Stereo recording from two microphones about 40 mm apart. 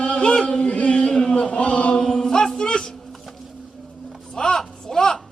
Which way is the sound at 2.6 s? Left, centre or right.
Centre.